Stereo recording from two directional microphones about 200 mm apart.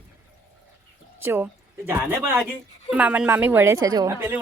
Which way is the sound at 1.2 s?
10° right (ahead or behind).